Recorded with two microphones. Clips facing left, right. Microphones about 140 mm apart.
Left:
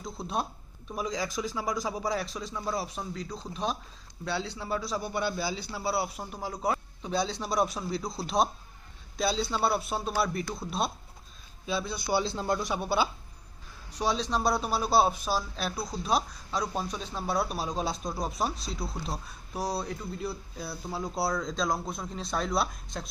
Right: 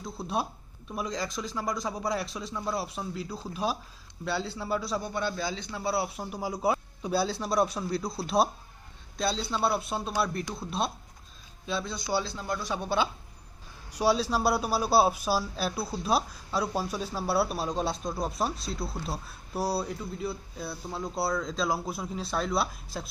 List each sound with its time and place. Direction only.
0.0 s a man's voice: 5° right (ahead or behind)
12.2 s a man's voice: 25° left (ahead or behind)
12.6 s a man's voice: 10° left (ahead or behind)
13.9 s a man's voice: 5° right (ahead or behind)